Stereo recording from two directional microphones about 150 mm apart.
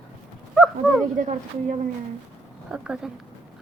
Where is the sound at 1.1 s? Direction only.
55° right (ahead or behind).